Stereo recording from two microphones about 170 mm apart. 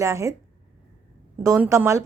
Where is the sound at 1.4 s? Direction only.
15° right (ahead or behind).